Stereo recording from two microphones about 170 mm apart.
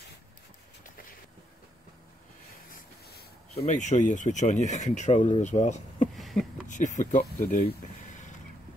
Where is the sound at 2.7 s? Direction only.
65° left (ahead or behind).